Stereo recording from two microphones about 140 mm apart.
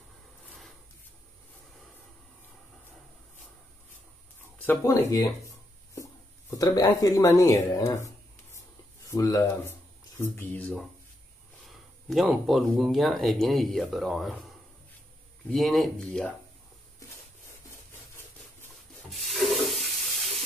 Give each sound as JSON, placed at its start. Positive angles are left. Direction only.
{"t": 4.6, "sound": "speech", "side_deg": 15}
{"t": 6.5, "sound": "speech", "side_deg": 25}
{"t": 8.5, "sound": "a sound", "side_deg": 25}
{"t": 12.1, "sound": "speech", "side_deg": 0}
{"t": 15.5, "sound": "speech", "side_deg": 0}
{"t": 19.0, "sound": "rub", "side_deg": 0}